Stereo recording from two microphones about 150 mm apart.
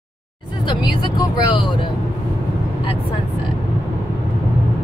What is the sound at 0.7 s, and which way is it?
Speech, 30° left (ahead or behind).